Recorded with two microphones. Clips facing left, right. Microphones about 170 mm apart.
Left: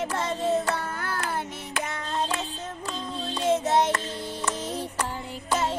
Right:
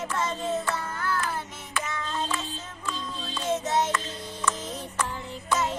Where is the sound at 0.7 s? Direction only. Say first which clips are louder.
Even; 65° left (ahead or behind).